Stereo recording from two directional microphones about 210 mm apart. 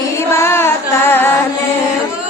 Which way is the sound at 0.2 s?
10° left (ahead or behind).